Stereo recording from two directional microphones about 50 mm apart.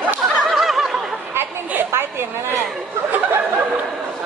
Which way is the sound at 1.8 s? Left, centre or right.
Right.